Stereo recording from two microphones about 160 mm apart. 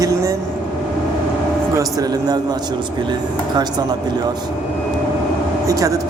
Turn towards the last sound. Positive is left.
turn(degrees=-20)  # may be behind; listen again after turning